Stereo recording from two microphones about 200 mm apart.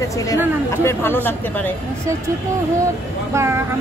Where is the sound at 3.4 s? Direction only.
15° right (ahead or behind).